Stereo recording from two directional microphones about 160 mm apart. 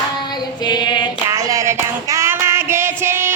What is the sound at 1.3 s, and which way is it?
Music, 20° right (ahead or behind).